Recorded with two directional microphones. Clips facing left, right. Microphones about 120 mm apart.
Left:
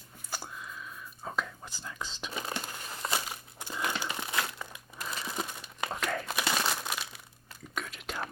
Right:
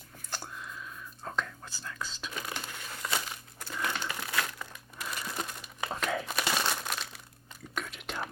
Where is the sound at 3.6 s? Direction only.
15° left (ahead or behind).